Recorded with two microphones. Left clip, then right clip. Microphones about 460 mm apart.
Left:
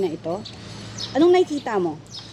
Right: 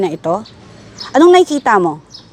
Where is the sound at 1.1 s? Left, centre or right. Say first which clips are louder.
Right 9 dB; right.